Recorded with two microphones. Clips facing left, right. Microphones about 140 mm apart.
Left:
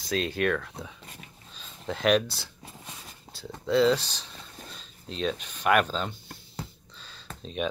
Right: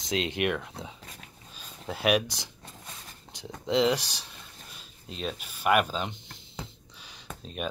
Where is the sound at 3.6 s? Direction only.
15° right (ahead or behind).